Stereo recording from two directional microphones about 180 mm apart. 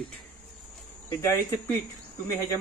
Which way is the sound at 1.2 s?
15° left (ahead or behind).